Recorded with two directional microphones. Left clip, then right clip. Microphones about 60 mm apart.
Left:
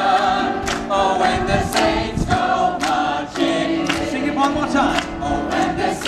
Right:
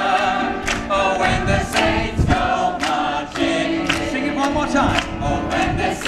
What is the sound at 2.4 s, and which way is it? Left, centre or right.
Choir, right.